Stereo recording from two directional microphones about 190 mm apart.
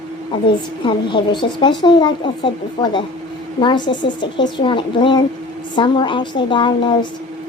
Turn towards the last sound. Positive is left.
turn(degrees=25)  # may be behind; listen again after turning